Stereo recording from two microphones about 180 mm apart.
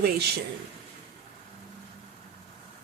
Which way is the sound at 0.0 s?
65° right (ahead or behind).